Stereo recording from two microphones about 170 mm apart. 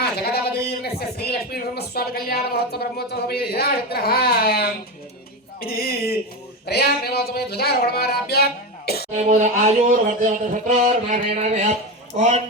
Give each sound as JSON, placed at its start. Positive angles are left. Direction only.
{"t": 0.0, "sound": "speech", "side_deg": 70}
{"t": 9.1, "sound": "speech", "side_deg": -45}